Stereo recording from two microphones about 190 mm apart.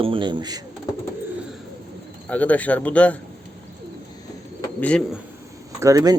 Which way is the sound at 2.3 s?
10° left (ahead or behind).